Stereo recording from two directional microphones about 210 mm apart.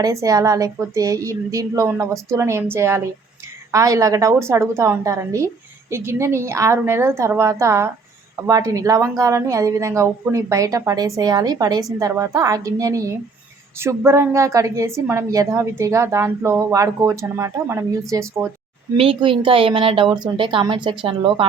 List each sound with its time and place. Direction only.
0.0 s a woman's voice: 15° right (ahead or behind)
18.9 s speech: 25° right (ahead or behind)